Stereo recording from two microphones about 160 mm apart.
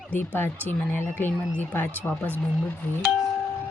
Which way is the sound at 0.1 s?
15° left (ahead or behind).